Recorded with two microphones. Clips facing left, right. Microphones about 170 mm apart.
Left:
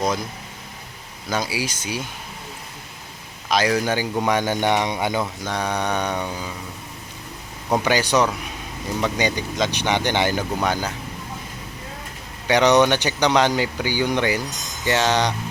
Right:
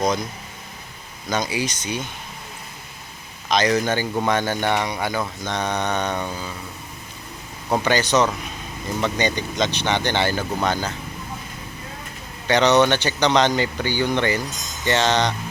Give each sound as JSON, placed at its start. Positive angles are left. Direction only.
{"t": 1.3, "sound": "speech", "side_deg": 5}
{"t": 3.5, "sound": "speech", "side_deg": 10}
{"t": 7.8, "sound": "speech", "side_deg": 10}
{"t": 12.5, "sound": "speech", "side_deg": 15}